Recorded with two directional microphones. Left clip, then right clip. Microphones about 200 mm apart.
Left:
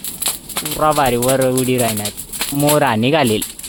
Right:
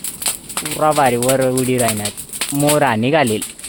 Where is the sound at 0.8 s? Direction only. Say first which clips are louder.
Even; 5° right (ahead or behind).